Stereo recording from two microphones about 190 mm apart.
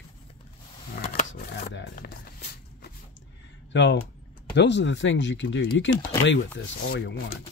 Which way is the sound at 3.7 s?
70° left (ahead or behind).